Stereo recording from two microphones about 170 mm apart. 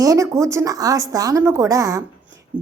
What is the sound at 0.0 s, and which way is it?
Speech, 20° right (ahead or behind).